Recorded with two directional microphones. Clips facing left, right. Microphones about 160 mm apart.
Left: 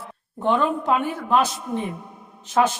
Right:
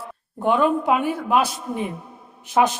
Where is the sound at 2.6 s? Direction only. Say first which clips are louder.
Right 1 dB; 15° right (ahead or behind).